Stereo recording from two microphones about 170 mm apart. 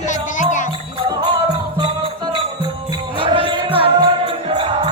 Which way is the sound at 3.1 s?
30° right (ahead or behind).